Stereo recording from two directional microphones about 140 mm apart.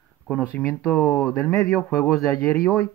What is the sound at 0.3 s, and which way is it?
Speech, 5° left (ahead or behind).